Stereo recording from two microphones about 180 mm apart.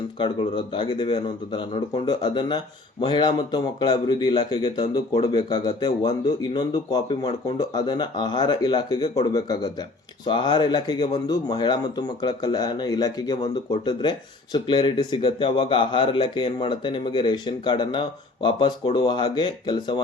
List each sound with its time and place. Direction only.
0.2 s speech: 25° left (ahead or behind)
10.2 s speech: 25° left (ahead or behind)